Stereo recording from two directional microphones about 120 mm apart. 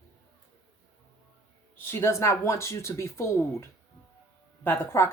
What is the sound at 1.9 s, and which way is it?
Speech, 20° left (ahead or behind).